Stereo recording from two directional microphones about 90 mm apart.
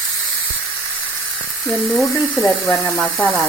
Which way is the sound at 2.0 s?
10° left (ahead or behind).